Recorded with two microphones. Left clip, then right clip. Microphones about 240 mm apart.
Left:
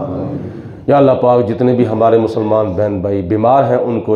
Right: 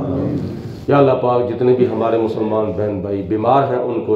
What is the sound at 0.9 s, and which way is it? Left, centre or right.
A man's voice, left.